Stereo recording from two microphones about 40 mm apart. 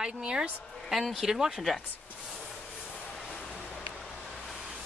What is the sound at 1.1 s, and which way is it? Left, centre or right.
Speech, centre.